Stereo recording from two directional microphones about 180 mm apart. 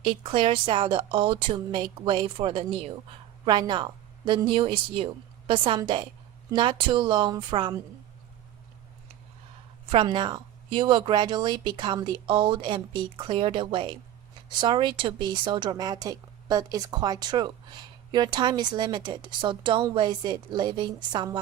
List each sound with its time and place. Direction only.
0.0 s speech: 30° right (ahead or behind)
9.9 s speech: 25° right (ahead or behind)